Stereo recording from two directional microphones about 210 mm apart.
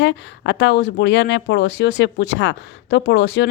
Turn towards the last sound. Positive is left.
turn(degrees=55)  # may be behind; listen again after turning